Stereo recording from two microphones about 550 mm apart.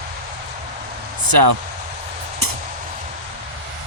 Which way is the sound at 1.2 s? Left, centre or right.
Right.